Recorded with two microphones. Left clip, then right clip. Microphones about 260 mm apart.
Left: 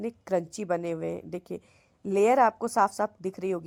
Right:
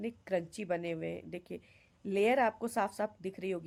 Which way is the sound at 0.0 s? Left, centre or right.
Centre.